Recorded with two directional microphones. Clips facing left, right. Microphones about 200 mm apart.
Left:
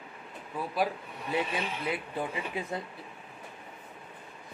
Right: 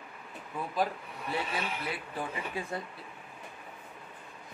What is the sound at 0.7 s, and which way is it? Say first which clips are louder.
Speech: left 1 dB; 15° left (ahead or behind).